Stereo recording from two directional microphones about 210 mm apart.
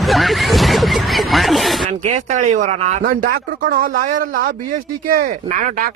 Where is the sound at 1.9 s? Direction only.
35° right (ahead or behind).